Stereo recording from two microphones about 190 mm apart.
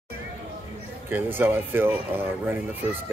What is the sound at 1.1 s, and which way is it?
Speech, 10° right (ahead or behind).